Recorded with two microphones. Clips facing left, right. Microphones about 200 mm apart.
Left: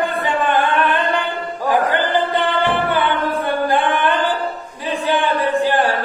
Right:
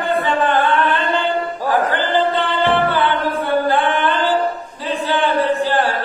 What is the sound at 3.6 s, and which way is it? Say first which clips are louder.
Singing: even; 15° left (ahead or behind).